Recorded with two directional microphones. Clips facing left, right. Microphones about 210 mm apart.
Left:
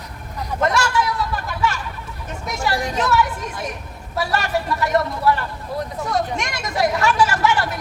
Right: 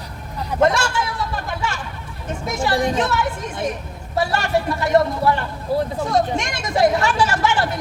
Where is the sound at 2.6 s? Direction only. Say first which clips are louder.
Right 3 dB; 30° right (ahead or behind).